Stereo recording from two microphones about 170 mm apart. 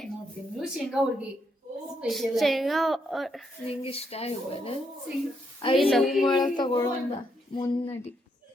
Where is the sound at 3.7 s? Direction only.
35° left (ahead or behind).